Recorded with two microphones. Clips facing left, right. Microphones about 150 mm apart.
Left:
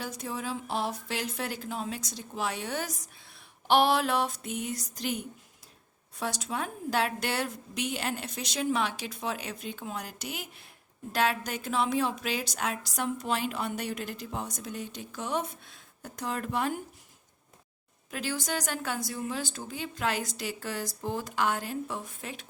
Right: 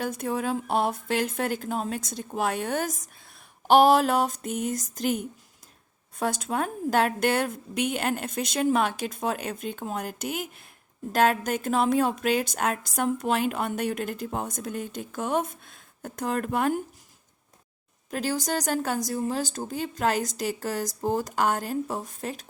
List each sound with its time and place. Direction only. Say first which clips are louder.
0.0 s a woman's voice: right 7 dB; 55° right (ahead or behind)
18.1 s a woman's voice: right 5 dB; 40° right (ahead or behind)